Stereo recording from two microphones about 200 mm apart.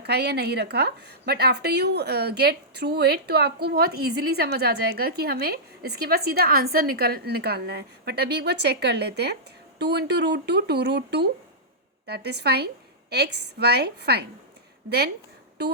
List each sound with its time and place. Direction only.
0.0 s a woman's voice: 55° right (ahead or behind)